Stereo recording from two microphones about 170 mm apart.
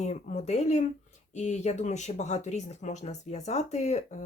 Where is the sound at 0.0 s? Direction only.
45° left (ahead or behind).